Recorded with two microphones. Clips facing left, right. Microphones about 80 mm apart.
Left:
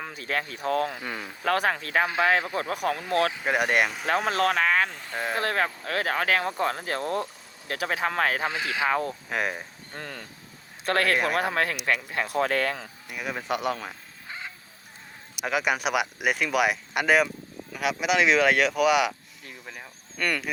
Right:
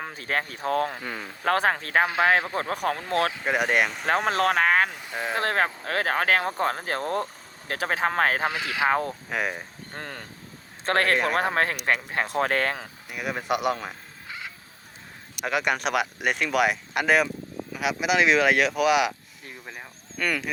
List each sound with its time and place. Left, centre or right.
0.0 s speech: right
1.0 s speech: centre
1.5 s speech: right
3.4 s speech: centre
4.3 s speech: right
4.9 s speech: centre
5.3 s speech: right
8.5 s speech: left
8.9 s speech: right
9.3 s speech: centre
9.9 s speech: right
13.1 s speech: centre
15.4 s speech: centre
19.8 s a sound: centre